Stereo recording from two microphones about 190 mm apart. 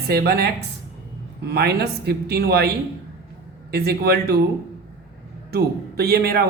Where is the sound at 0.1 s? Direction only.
55° right (ahead or behind).